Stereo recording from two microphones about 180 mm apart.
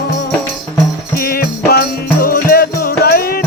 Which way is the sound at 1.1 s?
55° left (ahead or behind).